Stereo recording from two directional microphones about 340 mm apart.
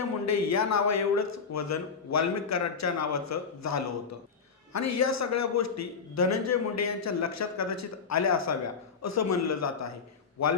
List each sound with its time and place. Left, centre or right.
0.3 s a man's voice: left